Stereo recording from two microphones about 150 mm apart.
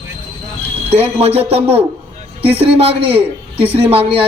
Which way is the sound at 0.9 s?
40° right (ahead or behind).